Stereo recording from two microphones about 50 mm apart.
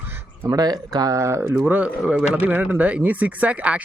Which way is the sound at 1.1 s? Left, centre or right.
Right.